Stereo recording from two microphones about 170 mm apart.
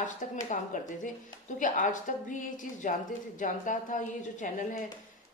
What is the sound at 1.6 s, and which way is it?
A woman's voice, 50° left (ahead or behind).